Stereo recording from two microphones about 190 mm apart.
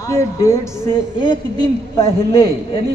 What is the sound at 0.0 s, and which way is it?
Speech, 15° left (ahead or behind).